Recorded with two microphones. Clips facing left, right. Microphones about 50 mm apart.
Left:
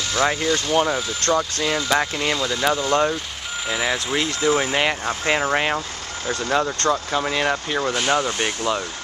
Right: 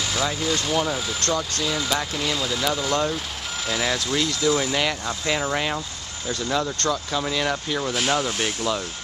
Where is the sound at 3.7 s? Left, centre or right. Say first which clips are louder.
Left 2 dB; centre.